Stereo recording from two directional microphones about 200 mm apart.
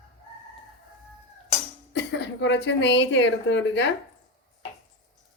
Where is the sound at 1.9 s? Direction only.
60° left (ahead or behind).